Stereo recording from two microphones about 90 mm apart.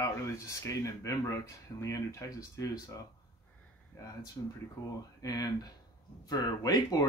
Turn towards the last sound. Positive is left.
turn(degrees=45)  # may be behind; listen again after turning